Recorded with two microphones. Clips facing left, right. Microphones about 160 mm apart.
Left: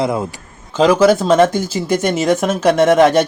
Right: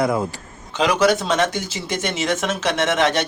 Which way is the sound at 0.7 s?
40° left (ahead or behind).